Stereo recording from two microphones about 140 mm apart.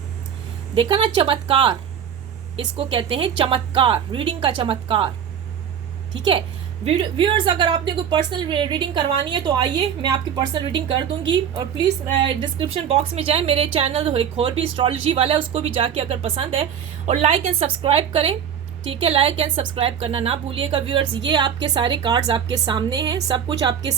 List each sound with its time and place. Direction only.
0.8 s a woman's voice: 40° right (ahead or behind)
2.7 s a woman's voice: 40° right (ahead or behind)
6.1 s a woman's voice: 35° right (ahead or behind)